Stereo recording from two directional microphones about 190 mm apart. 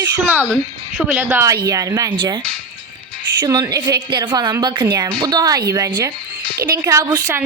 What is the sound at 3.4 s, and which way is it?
A child's voice, 15° right (ahead or behind).